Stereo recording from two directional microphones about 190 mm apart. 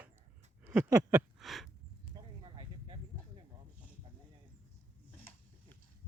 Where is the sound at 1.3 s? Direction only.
Centre (ahead or behind).